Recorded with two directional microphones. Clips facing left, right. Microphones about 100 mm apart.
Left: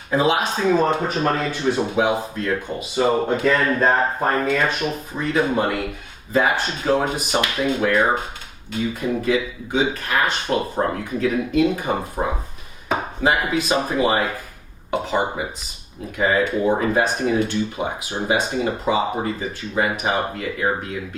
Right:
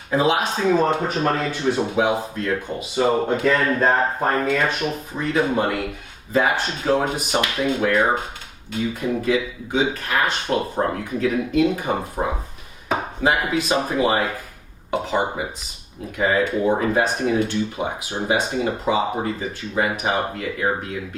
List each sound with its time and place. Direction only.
0.1 s speech: 10° left (ahead or behind)
12.9 s chopping: 15° left (ahead or behind)
14.8 s speech: 15° left (ahead or behind)